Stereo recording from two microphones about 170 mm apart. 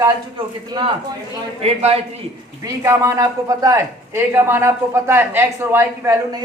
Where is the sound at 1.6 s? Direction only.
35° right (ahead or behind).